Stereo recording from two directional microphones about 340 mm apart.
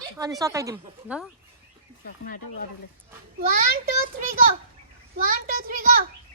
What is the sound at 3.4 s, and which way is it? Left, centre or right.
Speech, right.